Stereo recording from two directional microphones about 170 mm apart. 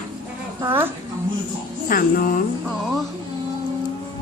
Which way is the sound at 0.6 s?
15° right (ahead or behind).